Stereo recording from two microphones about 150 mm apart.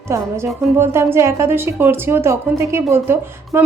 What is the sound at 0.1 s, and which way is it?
A woman's voice, 15° right (ahead or behind).